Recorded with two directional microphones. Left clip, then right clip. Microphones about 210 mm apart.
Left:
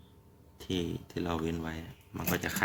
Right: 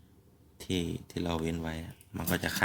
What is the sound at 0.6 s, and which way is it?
Speech, 25° right (ahead or behind).